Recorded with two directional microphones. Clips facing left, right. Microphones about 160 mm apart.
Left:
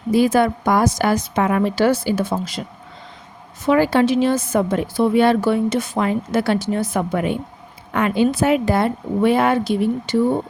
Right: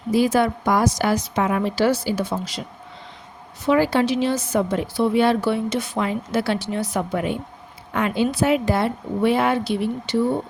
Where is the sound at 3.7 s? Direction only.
55° left (ahead or behind).